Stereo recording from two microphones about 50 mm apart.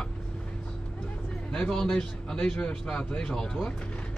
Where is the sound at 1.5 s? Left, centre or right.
Centre.